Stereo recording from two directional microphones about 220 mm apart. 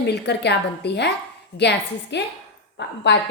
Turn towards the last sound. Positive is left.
turn(degrees=55)  # may be behind; listen again after turning